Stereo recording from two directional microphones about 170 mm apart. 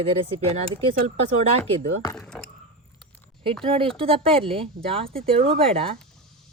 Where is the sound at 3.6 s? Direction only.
30° right (ahead or behind).